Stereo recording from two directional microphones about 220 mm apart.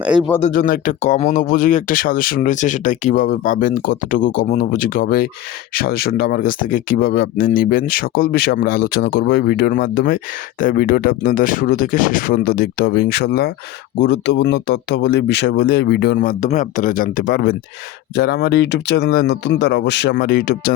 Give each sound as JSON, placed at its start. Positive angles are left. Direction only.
{"t": 0.0, "sound": "speech", "side_deg": -5}
{"t": 0.5, "sound": "speech", "side_deg": 40}